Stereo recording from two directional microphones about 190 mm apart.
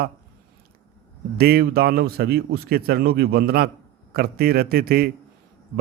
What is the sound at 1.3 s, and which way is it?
A man's voice, 55° right (ahead or behind).